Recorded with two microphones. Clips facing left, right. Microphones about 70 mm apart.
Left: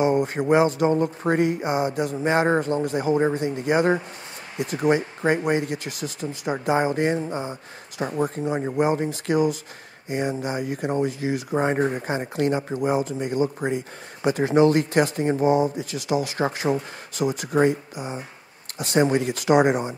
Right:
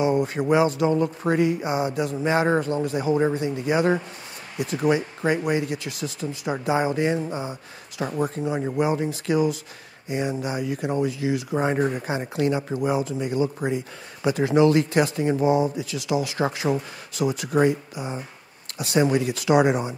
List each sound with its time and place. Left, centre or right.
0.0 s speech: left
8.0 s speech: left
8.4 s speech: left
8.9 s speech: left
18.8 s speech: left